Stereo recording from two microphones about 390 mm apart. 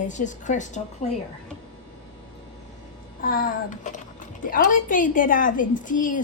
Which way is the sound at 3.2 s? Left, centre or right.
Left.